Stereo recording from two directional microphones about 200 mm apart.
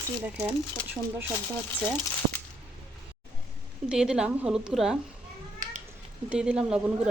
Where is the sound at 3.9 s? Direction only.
5° right (ahead or behind).